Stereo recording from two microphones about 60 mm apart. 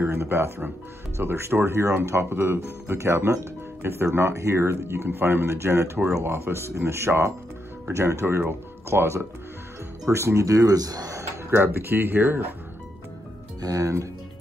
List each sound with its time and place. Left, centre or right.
0.0 s speech: right
11.5 s speech: right
13.6 s speech: right